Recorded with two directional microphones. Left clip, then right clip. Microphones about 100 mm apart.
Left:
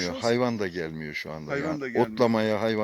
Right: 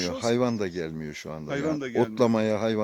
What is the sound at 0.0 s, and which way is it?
Speech, 15° right (ahead or behind).